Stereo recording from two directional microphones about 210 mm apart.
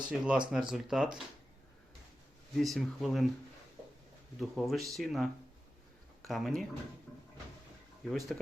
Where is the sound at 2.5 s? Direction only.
Centre (ahead or behind).